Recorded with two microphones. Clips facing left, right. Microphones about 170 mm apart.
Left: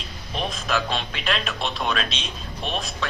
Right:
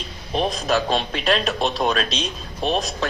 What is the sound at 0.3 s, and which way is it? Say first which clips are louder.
Speech: right 5 dB; 40° right (ahead or behind).